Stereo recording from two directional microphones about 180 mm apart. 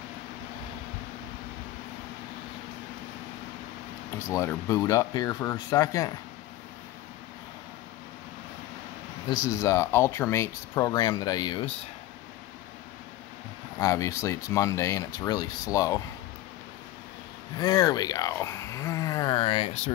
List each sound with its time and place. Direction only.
4.3 s speech: 15° left (ahead or behind)
9.3 s speech: 20° left (ahead or behind)
13.7 s speech: 15° left (ahead or behind)
17.6 s speech: 20° left (ahead or behind)